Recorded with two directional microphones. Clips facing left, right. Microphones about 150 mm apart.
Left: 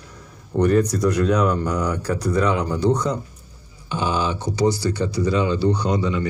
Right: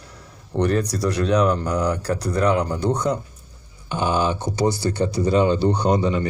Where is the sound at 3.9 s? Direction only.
50° right (ahead or behind).